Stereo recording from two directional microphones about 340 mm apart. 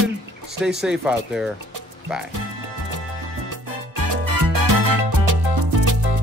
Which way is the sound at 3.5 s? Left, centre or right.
Right.